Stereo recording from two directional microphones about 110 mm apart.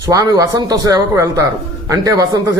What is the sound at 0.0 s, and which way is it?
A man's voice, 30° right (ahead or behind).